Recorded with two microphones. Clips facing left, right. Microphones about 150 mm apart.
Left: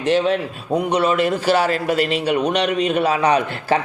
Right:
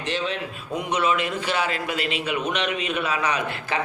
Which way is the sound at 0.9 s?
40° left (ahead or behind).